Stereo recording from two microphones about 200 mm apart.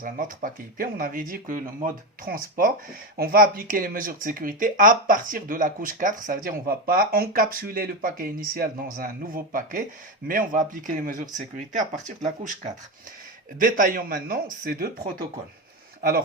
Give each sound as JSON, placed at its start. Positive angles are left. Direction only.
{"t": 0.0, "sound": "speech", "side_deg": -45}
{"t": 13.6, "sound": "speech", "side_deg": -45}
{"t": 16.0, "sound": "speech", "side_deg": -45}